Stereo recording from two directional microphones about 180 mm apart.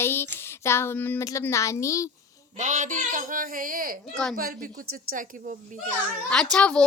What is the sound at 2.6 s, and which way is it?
Speech, 45° right (ahead or behind).